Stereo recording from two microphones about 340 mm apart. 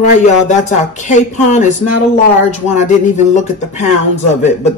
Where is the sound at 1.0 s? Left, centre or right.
Left.